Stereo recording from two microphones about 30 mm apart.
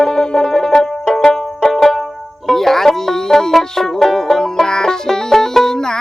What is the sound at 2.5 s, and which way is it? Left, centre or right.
Music, centre.